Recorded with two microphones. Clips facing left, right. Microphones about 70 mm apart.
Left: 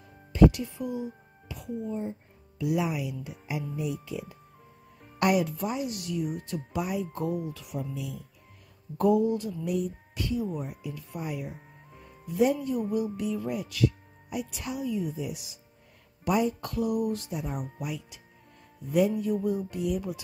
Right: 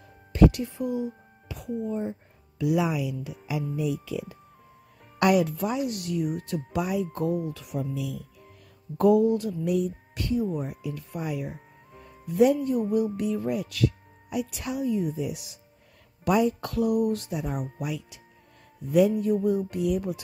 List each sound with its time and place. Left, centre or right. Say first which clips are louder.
0.3 s speech: even; right
2.6 s speech: right 3 dB; right
5.2 s speech: right 3 dB; right
7.1 s music: right 4 dB; right
7.9 s speech: right 4 dB; right
10.6 s speech: right 4 dB; right
12.6 s music: right 4 dB; right
13.5 s speech: right 2 dB; right
16.3 s speech: right 3 dB; right
17.3 s speech: right 3 dB; right
19.2 s music: right 4 dB; right